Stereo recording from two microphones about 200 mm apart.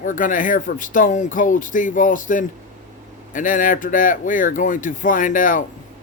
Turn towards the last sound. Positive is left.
turn(degrees=40)  # may be behind; listen again after turning